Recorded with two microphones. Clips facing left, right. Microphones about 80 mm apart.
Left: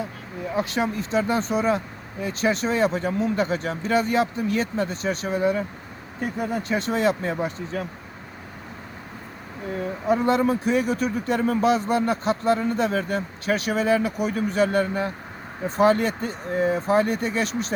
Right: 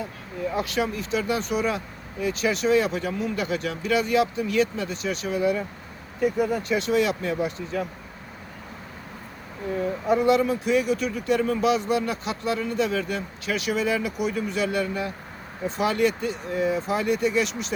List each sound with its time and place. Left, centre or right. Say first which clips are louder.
0.5 s speech: left 3 dB; left
10.2 s speech: even; left